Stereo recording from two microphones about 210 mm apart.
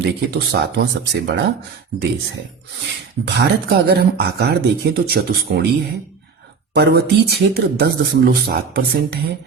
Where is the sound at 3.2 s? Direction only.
50° right (ahead or behind).